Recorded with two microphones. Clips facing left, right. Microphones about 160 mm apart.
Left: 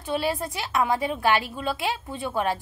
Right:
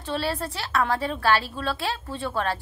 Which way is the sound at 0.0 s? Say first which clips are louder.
Left 1 dB; 15° left (ahead or behind).